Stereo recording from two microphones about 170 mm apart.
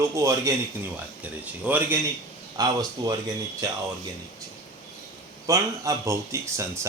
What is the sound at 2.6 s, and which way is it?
Speech, 20° right (ahead or behind).